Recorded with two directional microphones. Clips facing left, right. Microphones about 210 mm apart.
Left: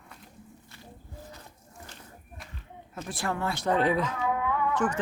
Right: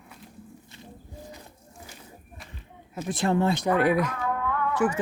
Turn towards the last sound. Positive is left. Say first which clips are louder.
# right 3 dB
turn(degrees=-10)  # may be behind; listen again after turning